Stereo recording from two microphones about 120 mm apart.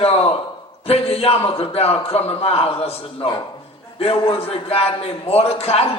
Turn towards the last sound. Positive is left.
turn(degrees=55)  # may be behind; listen again after turning